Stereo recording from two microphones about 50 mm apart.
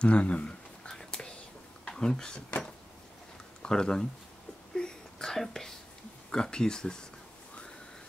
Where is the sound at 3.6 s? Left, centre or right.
Centre.